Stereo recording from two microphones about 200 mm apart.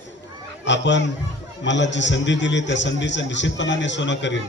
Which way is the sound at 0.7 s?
65° left (ahead or behind).